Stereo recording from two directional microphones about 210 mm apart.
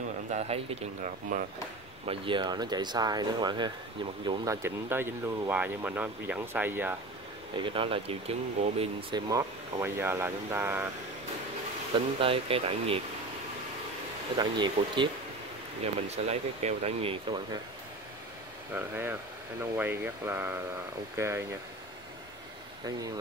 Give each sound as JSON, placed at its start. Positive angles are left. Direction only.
{"t": 0.3, "sound": "speech", "side_deg": -30}
{"t": 2.0, "sound": "speech", "side_deg": -25}
{"t": 4.6, "sound": "speech", "side_deg": -10}
{"t": 7.5, "sound": "speech", "side_deg": -25}
{"t": 9.3, "sound": "speech", "side_deg": -15}
{"t": 12.2, "sound": "speech", "side_deg": -25}
{"t": 14.4, "sound": "speech", "side_deg": -20}
{"t": 16.1, "sound": "speech", "side_deg": -30}
{"t": 18.7, "sound": "speech", "side_deg": -10}